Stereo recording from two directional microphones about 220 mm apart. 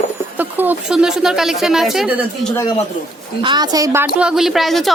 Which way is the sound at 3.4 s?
20° right (ahead or behind).